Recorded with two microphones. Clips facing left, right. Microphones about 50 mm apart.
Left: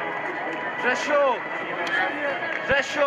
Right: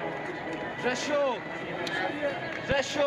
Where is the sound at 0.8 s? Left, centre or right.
Left.